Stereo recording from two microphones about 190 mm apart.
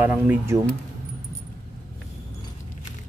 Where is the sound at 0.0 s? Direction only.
10° right (ahead or behind).